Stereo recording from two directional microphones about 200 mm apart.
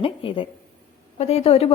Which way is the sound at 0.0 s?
25° left (ahead or behind).